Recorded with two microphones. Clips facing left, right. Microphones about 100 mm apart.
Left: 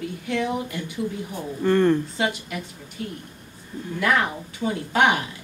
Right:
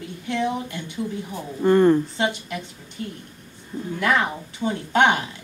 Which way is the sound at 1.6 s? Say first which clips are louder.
Right 3 dB; 15° right (ahead or behind).